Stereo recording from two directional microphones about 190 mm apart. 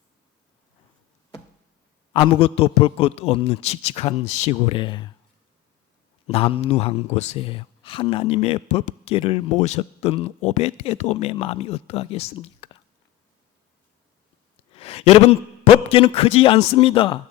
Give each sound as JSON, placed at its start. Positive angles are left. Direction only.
{"t": 2.1, "sound": "speech", "side_deg": 30}
{"t": 6.2, "sound": "speech", "side_deg": 30}
{"t": 14.7, "sound": "speech", "side_deg": 30}